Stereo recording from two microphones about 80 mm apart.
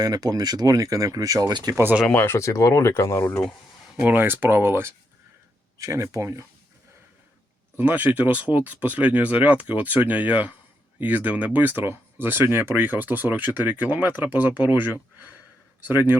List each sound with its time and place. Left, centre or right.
0.0 s speech: right
2.1 s speech: left
4.0 s speech: right
5.7 s speech: right
7.8 s speech: right